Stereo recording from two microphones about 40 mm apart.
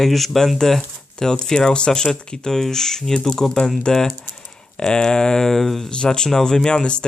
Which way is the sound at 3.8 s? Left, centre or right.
Centre.